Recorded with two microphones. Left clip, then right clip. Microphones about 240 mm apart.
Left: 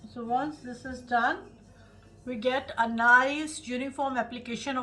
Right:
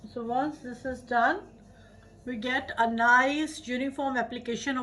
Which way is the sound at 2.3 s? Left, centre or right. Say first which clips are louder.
Left 1 dB; centre.